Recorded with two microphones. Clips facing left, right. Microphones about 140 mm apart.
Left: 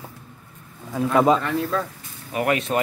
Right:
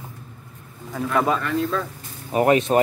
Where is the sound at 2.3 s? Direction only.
35° right (ahead or behind).